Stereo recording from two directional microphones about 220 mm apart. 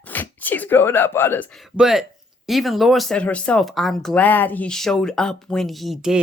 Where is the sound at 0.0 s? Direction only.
10° left (ahead or behind).